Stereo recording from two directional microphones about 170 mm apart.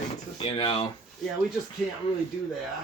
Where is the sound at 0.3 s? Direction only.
35° left (ahead or behind).